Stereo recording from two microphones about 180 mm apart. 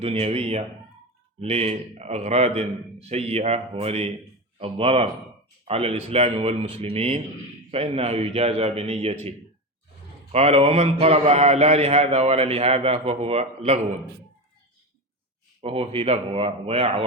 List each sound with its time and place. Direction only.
0.0 s a man's voice: 35° right (ahead or behind)
10.3 s a man's voice: 35° right (ahead or behind)
15.6 s a man's voice: 30° right (ahead or behind)